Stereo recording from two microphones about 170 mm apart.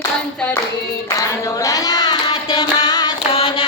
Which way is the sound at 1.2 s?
20° left (ahead or behind).